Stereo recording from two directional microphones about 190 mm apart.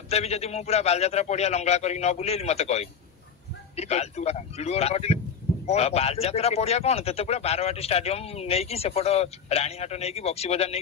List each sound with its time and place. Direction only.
0.1 s speech: 35° left (ahead or behind)